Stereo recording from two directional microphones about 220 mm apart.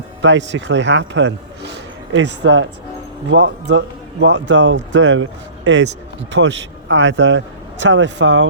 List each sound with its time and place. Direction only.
0.2 s a man's voice: 55° right (ahead or behind)